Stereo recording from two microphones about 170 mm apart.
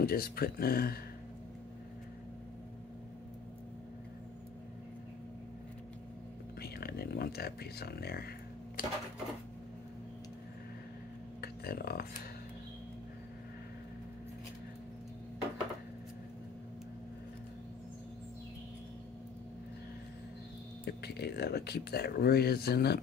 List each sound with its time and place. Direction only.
0.0 s speech: 65° left (ahead or behind)
6.6 s a sound: 65° left (ahead or behind)
11.4 s speech: 65° left (ahead or behind)
20.8 s speech: 75° left (ahead or behind)